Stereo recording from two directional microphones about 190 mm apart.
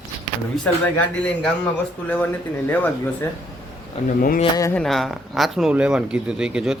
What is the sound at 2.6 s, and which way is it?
Speech, 10° left (ahead or behind).